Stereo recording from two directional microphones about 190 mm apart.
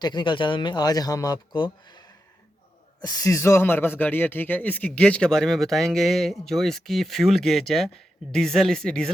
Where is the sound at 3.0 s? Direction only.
20° left (ahead or behind).